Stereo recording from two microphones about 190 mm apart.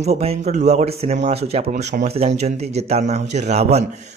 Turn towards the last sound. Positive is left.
turn(degrees=-35)  # may be behind; listen again after turning